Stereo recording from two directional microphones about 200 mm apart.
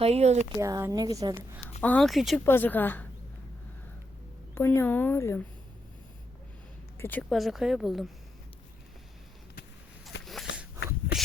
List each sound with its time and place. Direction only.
0.0 s speech: 30° right (ahead or behind)
0.6 s a woman's voice: 15° right (ahead or behind)
1.8 s speech: 5° left (ahead or behind)
2.4 s a woman's voice: 10° left (ahead or behind)
4.5 s a woman's voice: 10° left (ahead or behind)
7.0 s speech: 5° left (ahead or behind)
10.1 s a sound: 65° left (ahead or behind)